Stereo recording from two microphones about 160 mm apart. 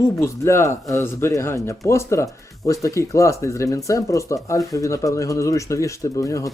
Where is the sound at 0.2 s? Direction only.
15° left (ahead or behind).